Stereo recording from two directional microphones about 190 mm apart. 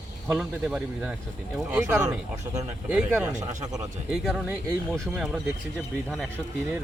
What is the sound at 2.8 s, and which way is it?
Speech, 5° right (ahead or behind).